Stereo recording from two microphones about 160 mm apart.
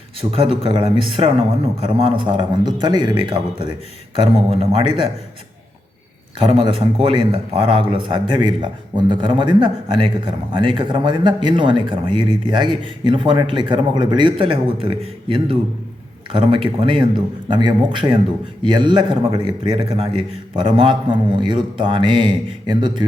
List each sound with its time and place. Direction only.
0.3 s speech: 35° right (ahead or behind)
6.4 s speech: 35° right (ahead or behind)